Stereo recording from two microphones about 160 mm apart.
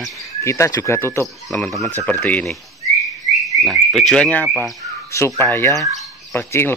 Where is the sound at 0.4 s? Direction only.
15° left (ahead or behind).